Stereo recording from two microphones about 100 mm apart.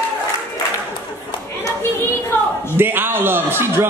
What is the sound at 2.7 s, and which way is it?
A man's voice, 20° right (ahead or behind).